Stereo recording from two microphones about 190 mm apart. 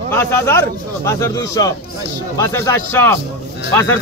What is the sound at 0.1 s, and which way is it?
A man's voice, 15° left (ahead or behind).